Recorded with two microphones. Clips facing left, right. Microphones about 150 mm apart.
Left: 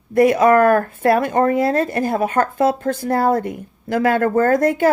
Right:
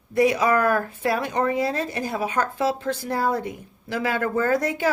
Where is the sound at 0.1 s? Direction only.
55° left (ahead or behind).